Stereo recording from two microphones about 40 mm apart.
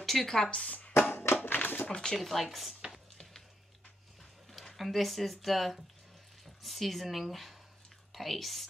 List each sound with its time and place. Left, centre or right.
0.0 s speech: centre
0.5 s speech: left
1.1 s a sound: left
1.9 s speech: left
2.1 s speech: centre
4.5 s speech: centre